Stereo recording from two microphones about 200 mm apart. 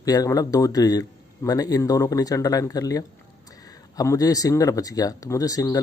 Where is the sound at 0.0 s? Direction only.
15° left (ahead or behind).